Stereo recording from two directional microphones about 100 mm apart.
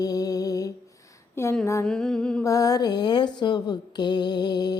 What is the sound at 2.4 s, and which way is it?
Mantra, 35° left (ahead or behind).